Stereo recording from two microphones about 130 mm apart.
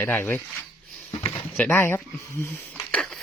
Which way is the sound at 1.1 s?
40° left (ahead or behind).